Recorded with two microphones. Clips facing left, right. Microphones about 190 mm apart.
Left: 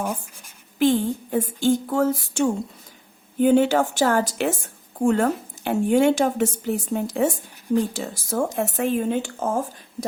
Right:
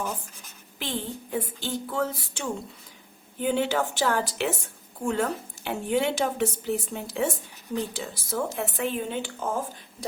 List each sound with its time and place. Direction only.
0.8 s speech: 45° left (ahead or behind)